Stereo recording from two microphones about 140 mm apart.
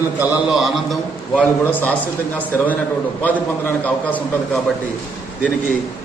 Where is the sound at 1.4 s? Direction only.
10° left (ahead or behind).